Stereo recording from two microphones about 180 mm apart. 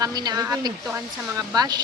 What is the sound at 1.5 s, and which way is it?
Speech, 20° right (ahead or behind).